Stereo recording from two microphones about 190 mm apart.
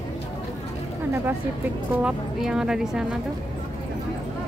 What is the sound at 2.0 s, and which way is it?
A woman's voice, 5° right (ahead or behind).